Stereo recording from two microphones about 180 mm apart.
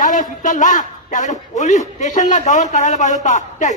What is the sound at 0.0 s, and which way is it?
A man's voice, 45° left (ahead or behind).